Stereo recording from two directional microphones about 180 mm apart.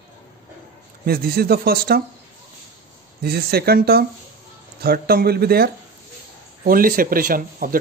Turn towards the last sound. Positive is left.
turn(degrees=-50)  # may be behind; listen again after turning